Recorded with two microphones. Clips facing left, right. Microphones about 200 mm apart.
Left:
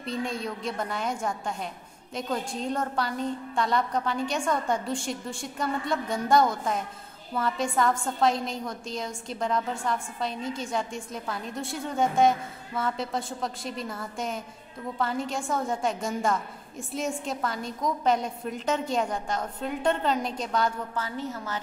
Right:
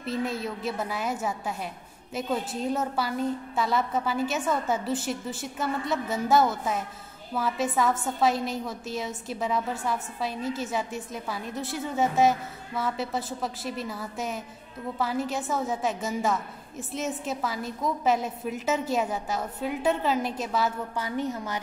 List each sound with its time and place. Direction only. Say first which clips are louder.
0.0 s a woman's voice: right 1 dB; 5° right (ahead or behind)
21.0 s a woman's voice: right 5 dB; 15° right (ahead or behind)